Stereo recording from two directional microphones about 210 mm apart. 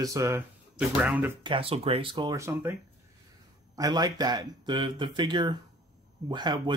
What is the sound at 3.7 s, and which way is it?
Speech, 15° right (ahead or behind).